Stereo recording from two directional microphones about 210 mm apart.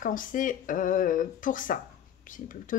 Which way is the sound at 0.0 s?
40° left (ahead or behind).